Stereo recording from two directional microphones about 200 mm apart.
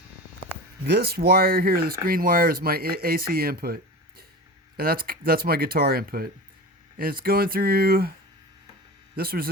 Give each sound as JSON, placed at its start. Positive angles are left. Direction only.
{"t": 0.9, "sound": "speech", "side_deg": -50}
{"t": 4.8, "sound": "speech", "side_deg": -50}
{"t": 9.1, "sound": "speech", "side_deg": -50}